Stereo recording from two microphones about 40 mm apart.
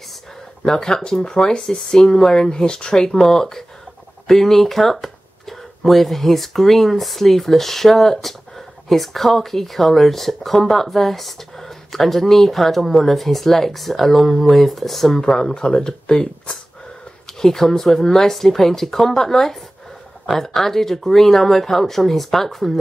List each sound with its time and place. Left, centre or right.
0.7 s speech: centre